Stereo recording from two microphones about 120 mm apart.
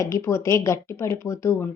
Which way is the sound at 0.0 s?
25° left (ahead or behind).